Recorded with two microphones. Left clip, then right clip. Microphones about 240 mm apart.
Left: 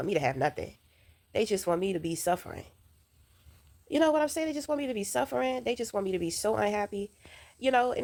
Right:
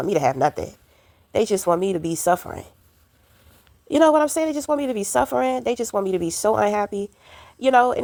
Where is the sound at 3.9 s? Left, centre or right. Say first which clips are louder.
Right 10 dB; right.